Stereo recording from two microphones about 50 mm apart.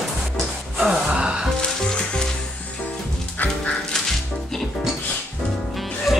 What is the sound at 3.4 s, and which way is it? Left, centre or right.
Music, left.